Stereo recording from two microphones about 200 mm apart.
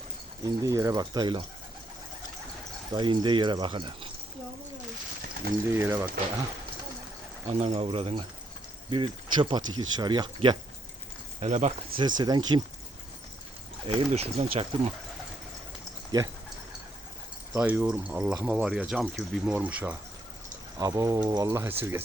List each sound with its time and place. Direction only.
0.4 s speech: 15° right (ahead or behind)
2.9 s speech: 20° right (ahead or behind)
5.7 s speech: 10° right (ahead or behind)
7.4 s speech: 30° right (ahead or behind)
11.3 s speech: 35° right (ahead or behind)
11.9 s speech: 20° right (ahead or behind)
13.8 s speech: 30° right (ahead or behind)
17.5 s speech: 10° right (ahead or behind)